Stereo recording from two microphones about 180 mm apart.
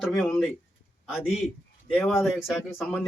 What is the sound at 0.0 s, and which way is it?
Speech, 5° left (ahead or behind).